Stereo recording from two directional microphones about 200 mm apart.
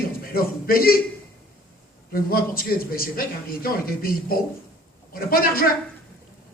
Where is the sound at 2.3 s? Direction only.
45° left (ahead or behind).